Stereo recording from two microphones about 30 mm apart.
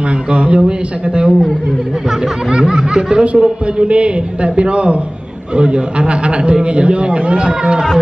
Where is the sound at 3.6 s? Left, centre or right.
Right.